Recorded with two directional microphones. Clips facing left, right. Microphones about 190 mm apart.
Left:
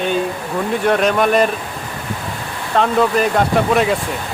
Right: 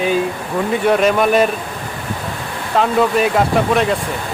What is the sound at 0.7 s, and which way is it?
Speech, centre (ahead or behind).